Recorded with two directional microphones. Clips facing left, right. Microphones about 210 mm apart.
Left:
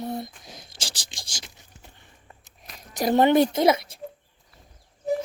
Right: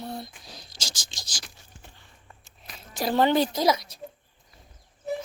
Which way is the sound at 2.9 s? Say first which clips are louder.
Left 4 dB; 20° left (ahead or behind).